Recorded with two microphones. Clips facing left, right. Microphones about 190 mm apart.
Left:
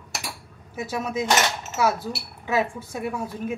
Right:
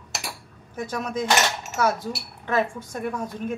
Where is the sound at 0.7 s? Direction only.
5° left (ahead or behind).